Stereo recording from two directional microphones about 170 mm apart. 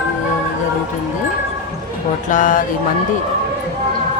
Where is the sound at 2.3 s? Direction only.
50° left (ahead or behind).